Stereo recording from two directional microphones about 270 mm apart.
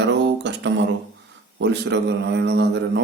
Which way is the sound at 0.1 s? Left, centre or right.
Right.